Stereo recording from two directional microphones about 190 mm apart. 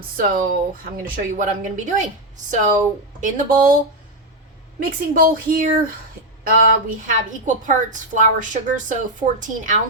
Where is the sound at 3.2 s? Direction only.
45° right (ahead or behind).